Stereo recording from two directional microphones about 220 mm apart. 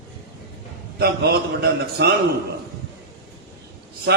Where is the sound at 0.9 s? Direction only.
45° right (ahead or behind).